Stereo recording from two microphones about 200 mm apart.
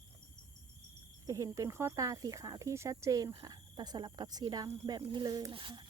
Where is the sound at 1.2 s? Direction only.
15° right (ahead or behind).